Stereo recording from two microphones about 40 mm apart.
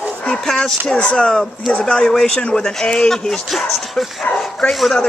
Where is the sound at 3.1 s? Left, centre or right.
Centre.